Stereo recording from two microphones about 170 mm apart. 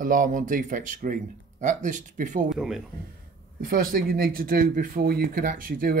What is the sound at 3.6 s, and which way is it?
Speech, 55° right (ahead or behind).